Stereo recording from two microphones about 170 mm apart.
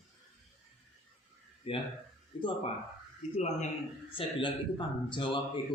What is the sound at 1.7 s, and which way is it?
A man's voice, 30° left (ahead or behind).